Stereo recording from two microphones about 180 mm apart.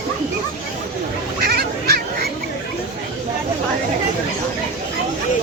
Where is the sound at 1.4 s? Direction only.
60° right (ahead or behind).